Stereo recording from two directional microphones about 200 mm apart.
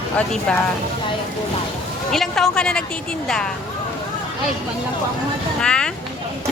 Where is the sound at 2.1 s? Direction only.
Centre (ahead or behind).